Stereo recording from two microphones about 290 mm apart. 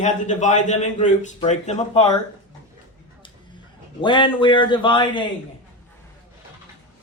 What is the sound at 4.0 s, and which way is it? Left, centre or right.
A man's voice, centre.